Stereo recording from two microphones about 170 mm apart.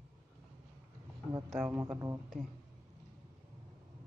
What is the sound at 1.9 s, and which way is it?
Speech, 20° right (ahead or behind).